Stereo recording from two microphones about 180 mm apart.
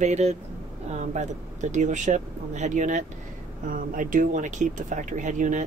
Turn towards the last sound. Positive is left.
turn(degrees=-45)  # may be behind; listen again after turning